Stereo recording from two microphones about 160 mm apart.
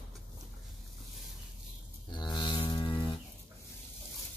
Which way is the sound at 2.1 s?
30° left (ahead or behind).